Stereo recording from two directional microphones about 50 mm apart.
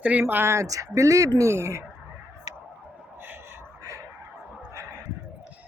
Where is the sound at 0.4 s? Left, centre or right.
Right.